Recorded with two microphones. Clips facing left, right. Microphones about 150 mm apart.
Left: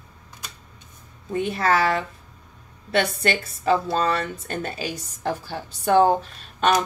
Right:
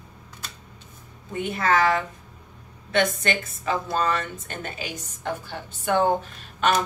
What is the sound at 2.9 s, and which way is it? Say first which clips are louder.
A woman's voice: left 1 dB; 35° left (ahead or behind).